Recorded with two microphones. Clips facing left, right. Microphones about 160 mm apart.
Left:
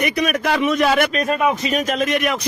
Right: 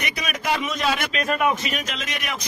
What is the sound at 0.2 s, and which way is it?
Speech, 60° left (ahead or behind).